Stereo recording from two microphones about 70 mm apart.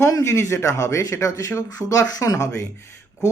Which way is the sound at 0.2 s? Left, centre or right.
Left.